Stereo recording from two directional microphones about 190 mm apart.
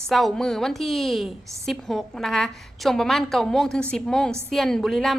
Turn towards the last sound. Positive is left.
turn(degrees=0)  # may be behind; listen again after turning